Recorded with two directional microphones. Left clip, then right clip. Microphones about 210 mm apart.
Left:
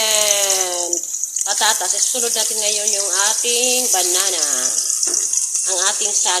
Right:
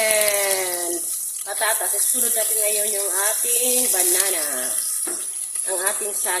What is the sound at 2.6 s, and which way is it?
Speech, 10° left (ahead or behind).